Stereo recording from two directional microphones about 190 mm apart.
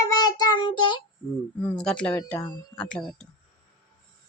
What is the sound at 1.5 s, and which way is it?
Speech, 5° left (ahead or behind).